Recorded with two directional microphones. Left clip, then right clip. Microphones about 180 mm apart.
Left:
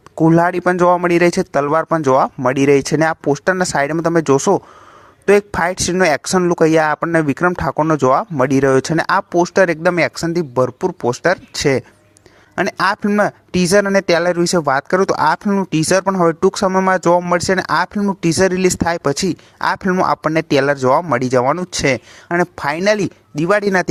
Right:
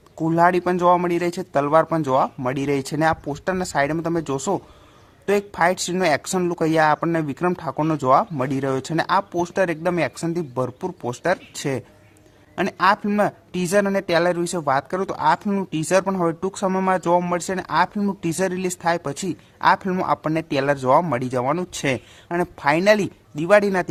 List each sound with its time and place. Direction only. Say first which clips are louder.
0.2 s speech: left 4 dB; 40° left (ahead or behind)